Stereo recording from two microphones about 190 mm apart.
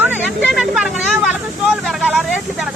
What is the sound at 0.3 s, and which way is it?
Vehicle, 5° right (ahead or behind).